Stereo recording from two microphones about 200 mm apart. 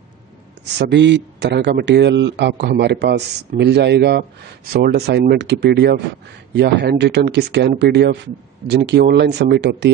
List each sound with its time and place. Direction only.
0.7 s a man's voice: 60° right (ahead or behind)